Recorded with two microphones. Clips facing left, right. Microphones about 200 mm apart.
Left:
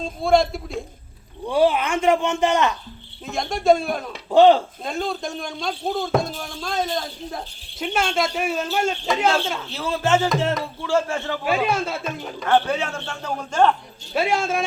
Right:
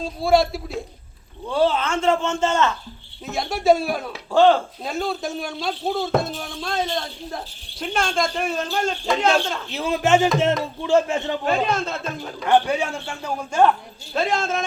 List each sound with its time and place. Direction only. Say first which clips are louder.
0.0 s speech: even; 5° right (ahead or behind)
1.5 s speech: left 2 dB; 15° left (ahead or behind)
3.2 s speech: even; 5° right (ahead or behind)
4.3 s speech: left 2 dB; 20° left (ahead or behind)
4.8 s speech: right 1 dB; 5° right (ahead or behind)
9.6 s a man's voice: right 3 dB; 15° right (ahead or behind)
11.4 s speech: left 2 dB; 10° left (ahead or behind)
12.5 s a man's voice: right 1 dB; 15° right (ahead or behind)
14.1 s speech: left 1 dB; 10° left (ahead or behind)